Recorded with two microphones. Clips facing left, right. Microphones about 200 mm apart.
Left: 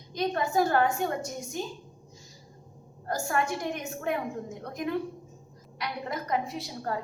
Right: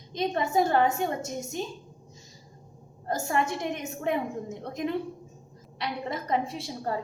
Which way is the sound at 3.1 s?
25° right (ahead or behind).